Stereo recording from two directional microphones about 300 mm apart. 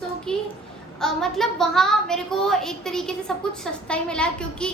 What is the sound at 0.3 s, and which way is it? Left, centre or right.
A woman's voice, centre.